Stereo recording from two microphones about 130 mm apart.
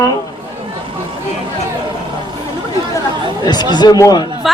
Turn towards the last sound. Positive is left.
turn(degrees=30)  # may be behind; listen again after turning